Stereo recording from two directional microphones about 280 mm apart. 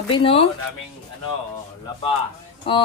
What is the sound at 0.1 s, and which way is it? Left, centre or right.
Speech, centre.